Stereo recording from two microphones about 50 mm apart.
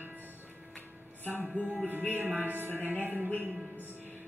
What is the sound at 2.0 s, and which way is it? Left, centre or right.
Music, right.